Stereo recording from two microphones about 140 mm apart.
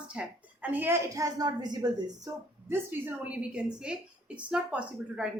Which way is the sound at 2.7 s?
15° right (ahead or behind).